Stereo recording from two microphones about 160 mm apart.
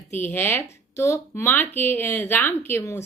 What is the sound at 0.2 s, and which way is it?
Speech, 15° left (ahead or behind).